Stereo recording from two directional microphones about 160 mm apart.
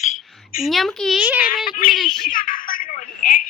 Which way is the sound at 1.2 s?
10° right (ahead or behind).